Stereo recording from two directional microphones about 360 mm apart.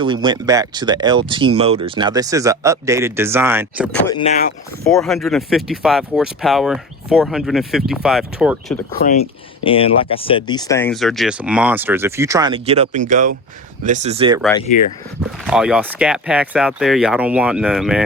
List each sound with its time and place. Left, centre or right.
0.0 s speech: centre
4.0 s speech: centre
4.8 s speech: centre
8.9 s speech: left; by 14.4 s centre
15.4 s speech: centre